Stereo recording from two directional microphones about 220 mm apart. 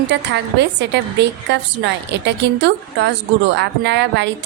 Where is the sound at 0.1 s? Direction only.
50° right (ahead or behind).